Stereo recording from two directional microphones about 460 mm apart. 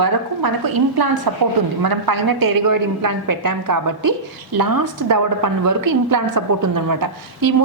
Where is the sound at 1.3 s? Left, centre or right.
Right.